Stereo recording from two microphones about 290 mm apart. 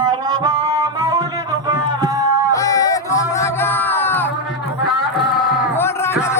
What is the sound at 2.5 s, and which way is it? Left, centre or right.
Music, centre.